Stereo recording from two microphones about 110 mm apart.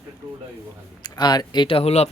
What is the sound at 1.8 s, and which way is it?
Speech, 70° left (ahead or behind).